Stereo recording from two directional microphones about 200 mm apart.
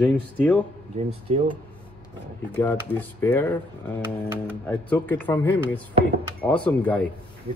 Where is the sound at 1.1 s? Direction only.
30° right (ahead or behind).